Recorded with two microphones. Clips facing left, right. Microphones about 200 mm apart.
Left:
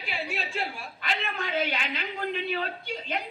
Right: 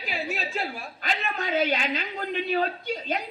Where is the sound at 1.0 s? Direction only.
45° right (ahead or behind).